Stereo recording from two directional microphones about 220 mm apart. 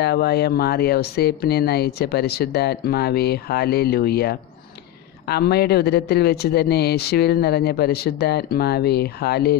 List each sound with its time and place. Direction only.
0.0 s speech: 45° left (ahead or behind)